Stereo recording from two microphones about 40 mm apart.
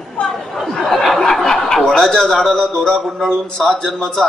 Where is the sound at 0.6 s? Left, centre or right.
Centre.